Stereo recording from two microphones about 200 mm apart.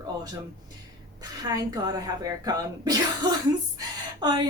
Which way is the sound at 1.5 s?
20° right (ahead or behind).